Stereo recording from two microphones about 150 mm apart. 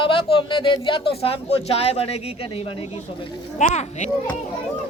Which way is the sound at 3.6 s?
50° left (ahead or behind).